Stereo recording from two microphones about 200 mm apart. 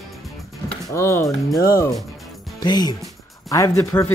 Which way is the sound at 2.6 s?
20° left (ahead or behind).